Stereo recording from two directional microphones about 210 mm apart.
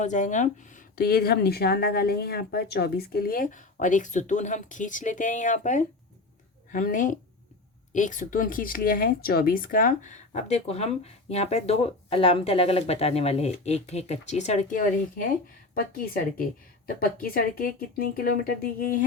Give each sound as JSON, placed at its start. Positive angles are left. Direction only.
{"t": 0.0, "sound": "speech", "side_deg": 35}